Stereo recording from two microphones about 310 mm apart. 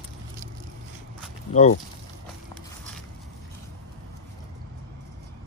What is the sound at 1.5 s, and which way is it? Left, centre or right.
Speech, left.